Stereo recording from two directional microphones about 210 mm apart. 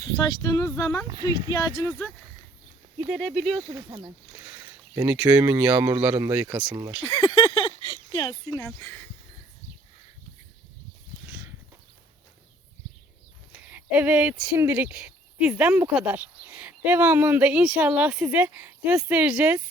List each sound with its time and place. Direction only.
0.0 s speech: 15° left (ahead or behind)
1.0 s speech: 20° right (ahead or behind)
1.5 s speech: 20° left (ahead or behind)
3.1 s speech: 5° left (ahead or behind)
3.7 s speech: 15° right (ahead or behind)
7.0 s speech: 25° left (ahead or behind)
13.5 s speech: 5° right (ahead or behind)